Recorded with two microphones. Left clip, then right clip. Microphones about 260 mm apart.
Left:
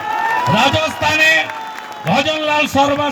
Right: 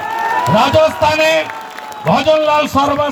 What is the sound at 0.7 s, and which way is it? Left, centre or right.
A man's voice, left.